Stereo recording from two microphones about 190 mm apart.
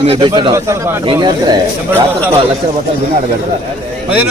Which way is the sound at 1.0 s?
25° right (ahead or behind).